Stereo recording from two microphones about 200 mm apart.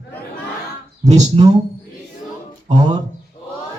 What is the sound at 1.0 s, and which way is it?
Speech, 35° right (ahead or behind).